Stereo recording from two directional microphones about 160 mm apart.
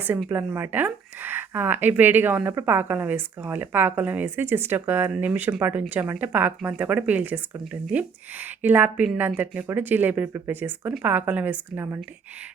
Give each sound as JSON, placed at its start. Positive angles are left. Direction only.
{"t": 0.3, "sound": "speech", "side_deg": -10}